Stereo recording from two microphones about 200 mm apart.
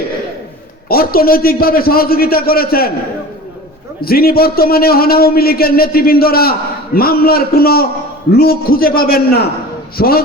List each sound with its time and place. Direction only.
0.9 s a man's voice: 50° left (ahead or behind)
4.0 s a man's voice: 50° left (ahead or behind)